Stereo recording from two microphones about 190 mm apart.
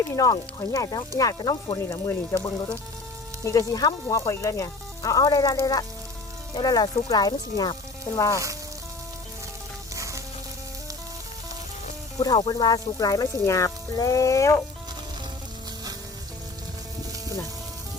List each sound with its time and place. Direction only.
0.2 s speech: 20° left (ahead or behind)
9.9 s sizzle: 15° right (ahead or behind)
12.2 s speech: 20° left (ahead or behind)